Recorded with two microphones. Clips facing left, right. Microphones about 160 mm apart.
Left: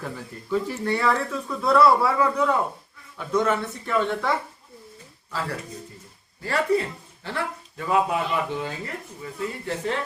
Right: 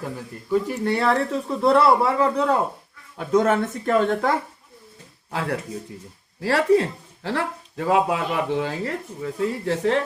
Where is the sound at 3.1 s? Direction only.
50° right (ahead or behind).